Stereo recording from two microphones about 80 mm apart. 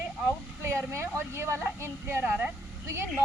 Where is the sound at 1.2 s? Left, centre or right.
Right.